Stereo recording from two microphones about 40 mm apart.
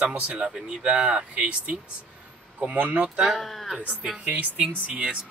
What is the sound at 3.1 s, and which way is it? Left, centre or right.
Speech, centre.